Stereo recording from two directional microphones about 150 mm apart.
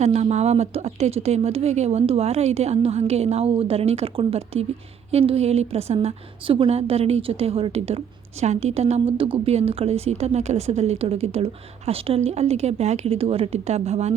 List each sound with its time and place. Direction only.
0.0 s a woman's voice: 45° right (ahead or behind)